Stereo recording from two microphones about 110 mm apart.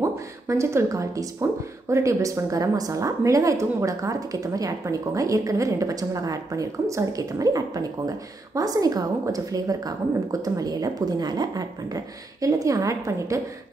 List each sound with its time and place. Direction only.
0.0 s speech: 25° right (ahead or behind)